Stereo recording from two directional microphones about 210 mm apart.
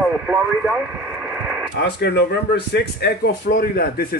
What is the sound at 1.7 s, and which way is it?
Speech, 55° left (ahead or behind).